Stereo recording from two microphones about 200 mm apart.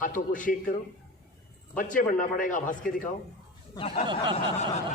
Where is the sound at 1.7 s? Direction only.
40° left (ahead or behind).